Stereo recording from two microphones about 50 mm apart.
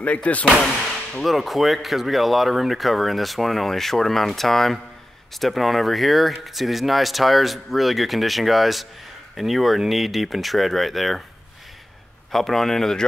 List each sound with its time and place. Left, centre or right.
0.0 s speech: left
0.6 s speech: centre
12.3 s a man's voice: centre